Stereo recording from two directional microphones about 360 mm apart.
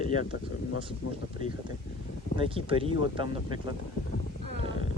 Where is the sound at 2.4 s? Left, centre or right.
Centre.